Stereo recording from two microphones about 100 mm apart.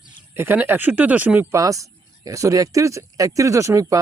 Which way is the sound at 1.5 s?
35° right (ahead or behind).